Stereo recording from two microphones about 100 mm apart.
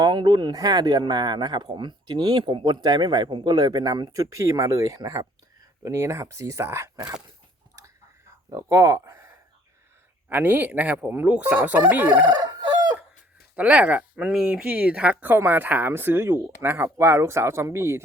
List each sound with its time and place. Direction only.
0.0 s speech: 50° right (ahead or behind); by 6.9 s 25° right (ahead or behind)
8.4 s speech: 35° right (ahead or behind)
10.2 s speech: 20° right (ahead or behind)
12.2 s speech: 50° right (ahead or behind)
12.5 s chicken: 45° right (ahead or behind)
13.6 s speech: 10° right (ahead or behind)